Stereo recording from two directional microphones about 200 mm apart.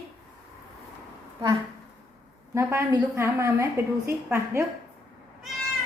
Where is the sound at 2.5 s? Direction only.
15° right (ahead or behind).